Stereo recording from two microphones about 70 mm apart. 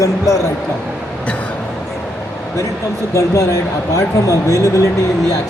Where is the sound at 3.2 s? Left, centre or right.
Left.